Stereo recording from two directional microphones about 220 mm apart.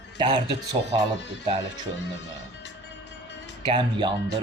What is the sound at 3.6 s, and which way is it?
Speech, 20° right (ahead or behind).